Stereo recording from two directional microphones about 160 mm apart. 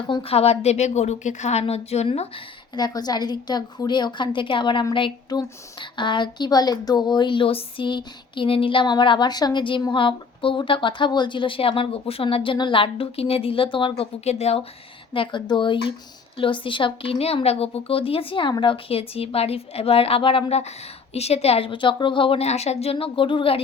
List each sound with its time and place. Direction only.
0.1 s a woman's voice: 35° left (ahead or behind)
2.7 s a woman's voice: 25° left (ahead or behind)